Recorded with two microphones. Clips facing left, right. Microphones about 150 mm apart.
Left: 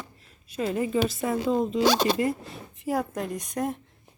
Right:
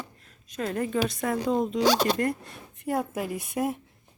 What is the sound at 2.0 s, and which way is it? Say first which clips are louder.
Speech: left 1 dB; 15° left (ahead or behind).